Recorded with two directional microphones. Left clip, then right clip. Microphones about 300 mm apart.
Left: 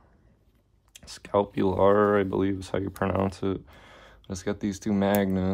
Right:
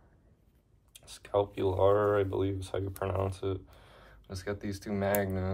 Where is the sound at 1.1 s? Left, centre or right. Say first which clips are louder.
Left 5 dB; left.